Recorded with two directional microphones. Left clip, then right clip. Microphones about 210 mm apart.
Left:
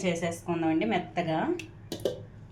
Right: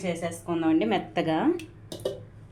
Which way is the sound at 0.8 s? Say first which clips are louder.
Right 3 dB; 40° right (ahead or behind).